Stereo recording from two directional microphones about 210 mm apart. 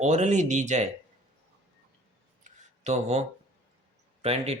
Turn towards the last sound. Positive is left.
turn(degrees=-30)  # may be behind; listen again after turning